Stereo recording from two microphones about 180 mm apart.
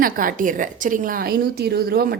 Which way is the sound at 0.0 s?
50° right (ahead or behind).